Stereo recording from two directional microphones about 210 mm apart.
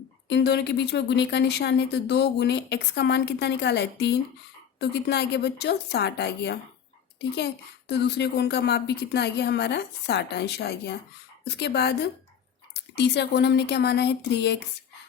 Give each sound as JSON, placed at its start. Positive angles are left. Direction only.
{"t": 0.3, "sound": "a woman's voice", "side_deg": 55}